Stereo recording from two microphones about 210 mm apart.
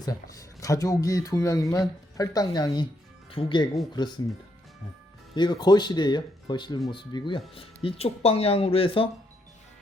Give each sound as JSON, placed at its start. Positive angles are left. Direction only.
{"t": 0.0, "sound": "speech", "side_deg": 15}
{"t": 5.3, "sound": "speech", "side_deg": 20}